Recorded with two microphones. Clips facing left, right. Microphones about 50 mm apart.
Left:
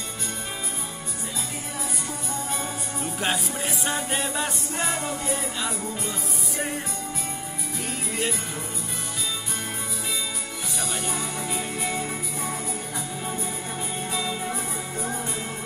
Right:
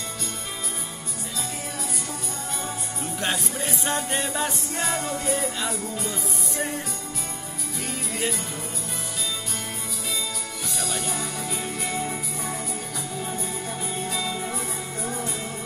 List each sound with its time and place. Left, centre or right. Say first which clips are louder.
3.0 s music: left 1 dB; centre
10.8 s music: even; centre
12.0 s music: even; centre